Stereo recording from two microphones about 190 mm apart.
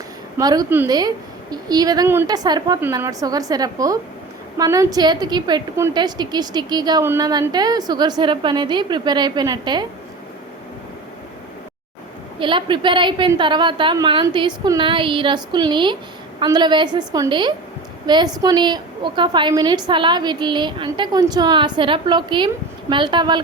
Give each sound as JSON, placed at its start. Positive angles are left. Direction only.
{"t": 0.3, "sound": "a woman's voice", "side_deg": -20}
{"t": 12.4, "sound": "a woman's voice", "side_deg": -25}